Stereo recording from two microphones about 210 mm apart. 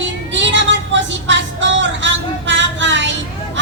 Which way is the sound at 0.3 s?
60° right (ahead or behind).